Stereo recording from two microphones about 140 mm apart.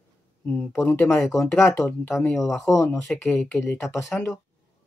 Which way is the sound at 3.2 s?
10° left (ahead or behind).